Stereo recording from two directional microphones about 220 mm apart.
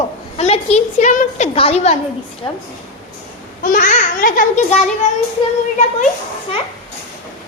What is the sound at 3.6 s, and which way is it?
A child's voice, 40° left (ahead or behind).